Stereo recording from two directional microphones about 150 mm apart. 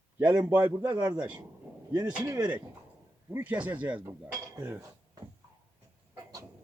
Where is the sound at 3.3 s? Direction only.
10° right (ahead or behind).